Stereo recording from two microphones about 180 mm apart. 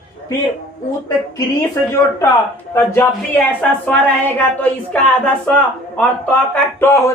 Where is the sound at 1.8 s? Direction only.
15° left (ahead or behind).